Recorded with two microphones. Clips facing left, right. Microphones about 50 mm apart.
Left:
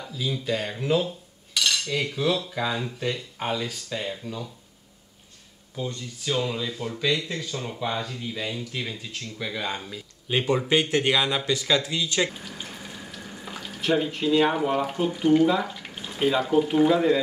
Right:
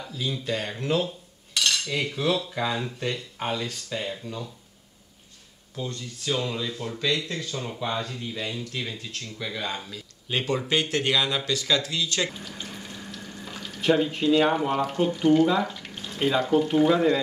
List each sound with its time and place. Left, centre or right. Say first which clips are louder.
0.0 s cutlery: left 1 dB; centre
5.8 s cutlery: left 1 dB; centre
8.2 s speech: left 1 dB; centre
12.3 s frying: even; centre
13.7 s speech: right 2 dB; centre
16.9 s cutlery: left 1 dB; centre